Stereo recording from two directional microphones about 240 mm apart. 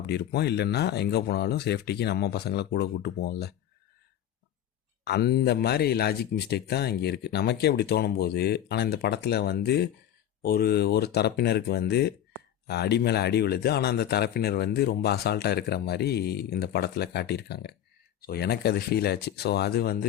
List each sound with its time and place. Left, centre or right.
0.0 s speech: left
5.0 s speech: left